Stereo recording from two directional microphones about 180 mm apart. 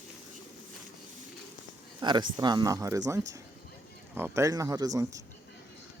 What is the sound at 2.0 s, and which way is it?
Speech, 25° right (ahead or behind).